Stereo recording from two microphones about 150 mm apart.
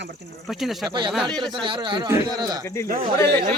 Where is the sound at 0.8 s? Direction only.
30° right (ahead or behind).